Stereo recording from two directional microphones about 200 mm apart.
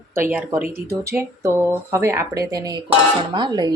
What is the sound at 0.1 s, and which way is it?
Speech, 10° right (ahead or behind).